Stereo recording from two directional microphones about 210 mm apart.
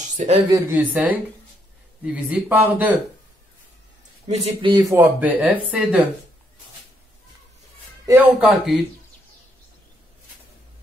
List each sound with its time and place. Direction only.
0.0 s a sound: 35° right (ahead or behind)
0.5 s speech: 10° right (ahead or behind)
2.1 s speech: 5° right (ahead or behind)
4.3 s speech: 25° right (ahead or behind); by 6.0 s 5° right (ahead or behind)
8.1 s speech: 5° right (ahead or behind)